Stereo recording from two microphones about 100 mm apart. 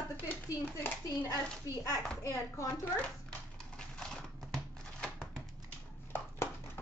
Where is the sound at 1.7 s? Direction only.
35° left (ahead or behind).